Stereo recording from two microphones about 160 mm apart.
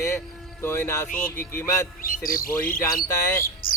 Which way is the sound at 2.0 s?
60° left (ahead or behind).